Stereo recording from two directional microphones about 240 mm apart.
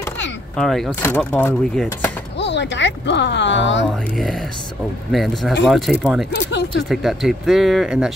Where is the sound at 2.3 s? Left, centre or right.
Left.